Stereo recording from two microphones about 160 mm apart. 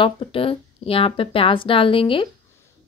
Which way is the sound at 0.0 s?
35° left (ahead or behind).